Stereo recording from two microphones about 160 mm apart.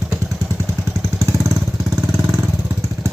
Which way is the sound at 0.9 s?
20° right (ahead or behind).